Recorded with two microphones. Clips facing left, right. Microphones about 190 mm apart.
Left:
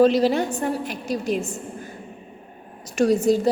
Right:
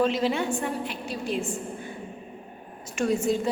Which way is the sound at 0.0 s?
35° left (ahead or behind).